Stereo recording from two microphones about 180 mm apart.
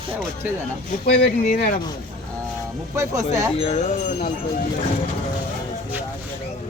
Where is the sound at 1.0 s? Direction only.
65° left (ahead or behind).